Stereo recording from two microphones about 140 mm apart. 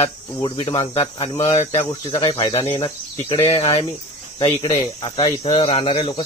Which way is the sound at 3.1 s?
45° left (ahead or behind).